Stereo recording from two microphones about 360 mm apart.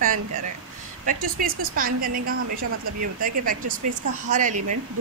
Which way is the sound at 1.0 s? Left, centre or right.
Right.